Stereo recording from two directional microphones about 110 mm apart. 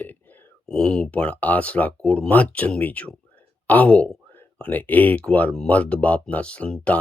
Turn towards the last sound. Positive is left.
turn(degrees=10)  # may be behind; listen again after turning